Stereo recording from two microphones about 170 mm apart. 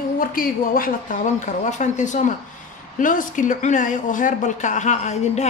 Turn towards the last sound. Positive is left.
turn(degrees=40)  # may be behind; listen again after turning